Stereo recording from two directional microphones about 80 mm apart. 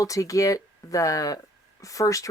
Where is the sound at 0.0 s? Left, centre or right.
Left.